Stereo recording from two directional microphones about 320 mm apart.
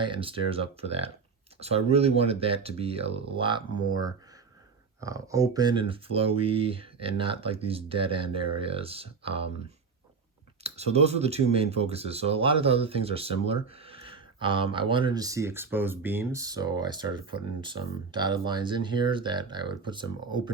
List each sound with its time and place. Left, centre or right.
0.0 s speech: centre
10.6 s speech: centre